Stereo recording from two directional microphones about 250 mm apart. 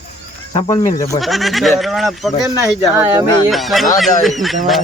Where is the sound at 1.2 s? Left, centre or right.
Centre.